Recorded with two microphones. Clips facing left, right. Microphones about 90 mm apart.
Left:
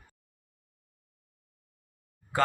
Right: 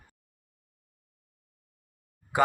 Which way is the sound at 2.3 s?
15° right (ahead or behind).